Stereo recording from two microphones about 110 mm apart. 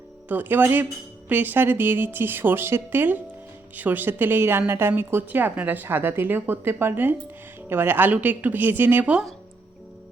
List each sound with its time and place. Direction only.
0.3 s a woman's voice: 15° right (ahead or behind)